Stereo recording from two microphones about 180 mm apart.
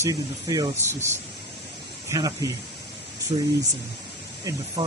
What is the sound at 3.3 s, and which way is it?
Speech, 30° right (ahead or behind).